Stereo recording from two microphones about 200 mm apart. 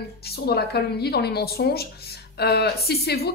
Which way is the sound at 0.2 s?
50° left (ahead or behind).